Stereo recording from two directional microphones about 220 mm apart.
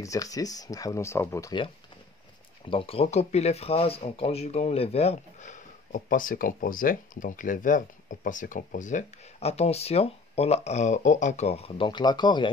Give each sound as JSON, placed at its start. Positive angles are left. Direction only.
{"t": 0.0, "sound": "speech", "side_deg": 15}